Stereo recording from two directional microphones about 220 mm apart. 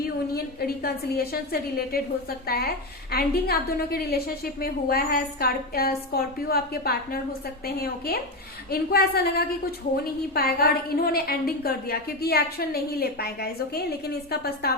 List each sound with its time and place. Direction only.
0.0 s a woman's voice: 45° left (ahead or behind)